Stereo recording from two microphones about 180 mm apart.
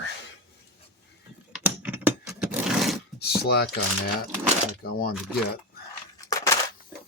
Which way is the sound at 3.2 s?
65° left (ahead or behind).